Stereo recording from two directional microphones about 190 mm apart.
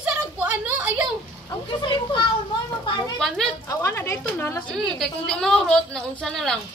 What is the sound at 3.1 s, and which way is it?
Speech, centre (ahead or behind).